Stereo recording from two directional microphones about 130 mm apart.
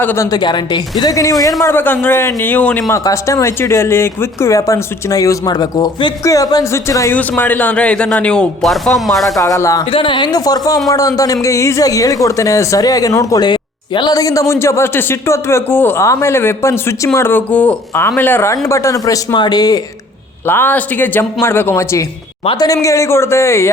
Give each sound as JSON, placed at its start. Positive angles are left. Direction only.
{"t": 0.0, "sound": "a man's voice", "side_deg": 15}
{"t": 0.3, "sound": "speech", "side_deg": 35}
{"t": 1.6, "sound": "a man's voice", "side_deg": 15}
{"t": 2.9, "sound": "speech", "side_deg": 25}
{"t": 7.1, "sound": "a man's voice", "side_deg": 10}
{"t": 9.4, "sound": "speech", "side_deg": 25}
{"t": 9.9, "sound": "a woman's voice", "side_deg": 40}
{"t": 20.5, "sound": "a man's voice", "side_deg": 15}
{"t": 22.4, "sound": "speech", "side_deg": 30}